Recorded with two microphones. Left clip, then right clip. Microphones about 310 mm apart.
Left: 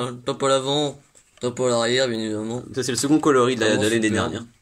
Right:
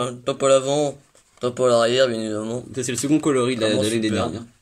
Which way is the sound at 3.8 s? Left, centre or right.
Left.